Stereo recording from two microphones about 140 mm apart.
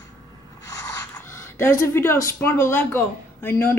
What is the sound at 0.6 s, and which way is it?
Speech, 25° left (ahead or behind).